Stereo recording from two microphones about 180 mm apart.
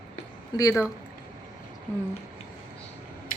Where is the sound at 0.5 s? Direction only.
20° left (ahead or behind).